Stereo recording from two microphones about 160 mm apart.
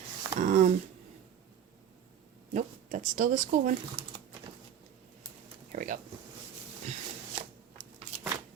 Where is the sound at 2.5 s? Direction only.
50° right (ahead or behind).